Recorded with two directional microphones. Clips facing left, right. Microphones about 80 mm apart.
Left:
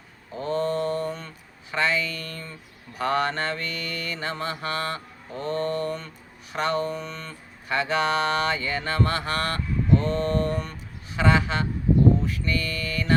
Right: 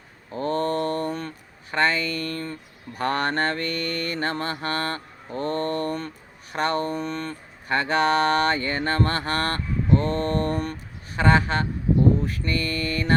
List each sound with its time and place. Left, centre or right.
0.3 s mantra: right